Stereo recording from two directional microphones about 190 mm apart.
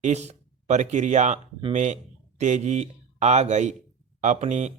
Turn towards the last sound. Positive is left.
turn(degrees=-40)  # may be behind; listen again after turning